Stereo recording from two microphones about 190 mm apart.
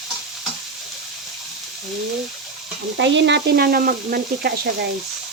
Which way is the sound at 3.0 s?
70° right (ahead or behind).